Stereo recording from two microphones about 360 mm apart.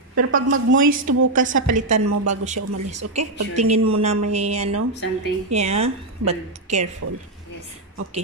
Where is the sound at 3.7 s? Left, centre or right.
Centre.